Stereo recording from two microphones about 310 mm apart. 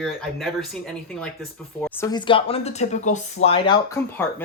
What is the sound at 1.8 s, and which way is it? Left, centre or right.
Speech, centre.